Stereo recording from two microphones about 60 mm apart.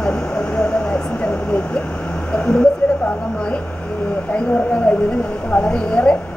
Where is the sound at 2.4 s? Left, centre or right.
Centre.